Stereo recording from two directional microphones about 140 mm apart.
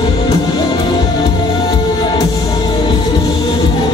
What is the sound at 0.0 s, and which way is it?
Music, 30° left (ahead or behind).